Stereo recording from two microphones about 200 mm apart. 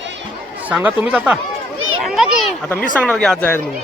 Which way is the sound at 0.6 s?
5° right (ahead or behind).